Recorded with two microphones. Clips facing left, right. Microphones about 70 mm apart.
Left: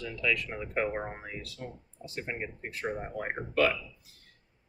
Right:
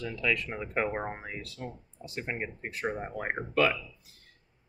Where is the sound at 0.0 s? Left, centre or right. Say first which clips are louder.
Right 1 dB; right.